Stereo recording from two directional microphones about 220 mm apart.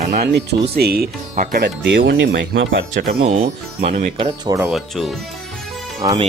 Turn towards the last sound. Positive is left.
turn(degrees=-15)  # may be behind; listen again after turning